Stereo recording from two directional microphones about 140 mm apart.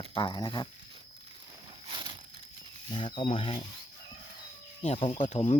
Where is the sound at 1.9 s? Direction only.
35° right (ahead or behind).